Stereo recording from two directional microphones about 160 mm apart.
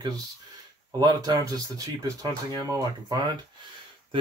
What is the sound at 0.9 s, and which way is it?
Speech, 25° right (ahead or behind).